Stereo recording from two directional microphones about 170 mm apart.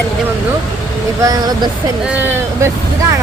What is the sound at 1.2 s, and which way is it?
Speech, 20° right (ahead or behind).